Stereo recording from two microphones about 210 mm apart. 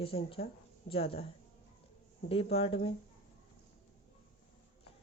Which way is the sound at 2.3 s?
30° left (ahead or behind).